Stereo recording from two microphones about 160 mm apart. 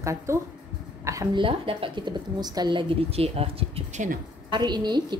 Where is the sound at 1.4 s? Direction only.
35° right (ahead or behind); by 4.2 s 50° right (ahead or behind).